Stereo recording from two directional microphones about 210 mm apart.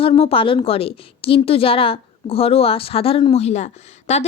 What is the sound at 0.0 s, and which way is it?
A woman's voice, 25° left (ahead or behind).